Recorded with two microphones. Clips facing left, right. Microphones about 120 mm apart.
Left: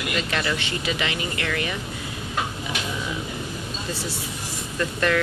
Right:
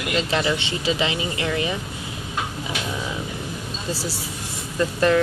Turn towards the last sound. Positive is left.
turn(degrees=-25)  # may be behind; listen again after turning